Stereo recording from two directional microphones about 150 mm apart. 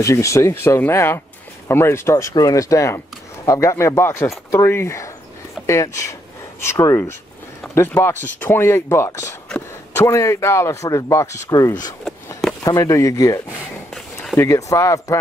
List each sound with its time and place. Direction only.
0.0 s speech: 20° left (ahead or behind)